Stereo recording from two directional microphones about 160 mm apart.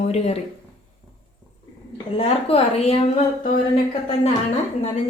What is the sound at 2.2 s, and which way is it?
Speech, 35° left (ahead or behind).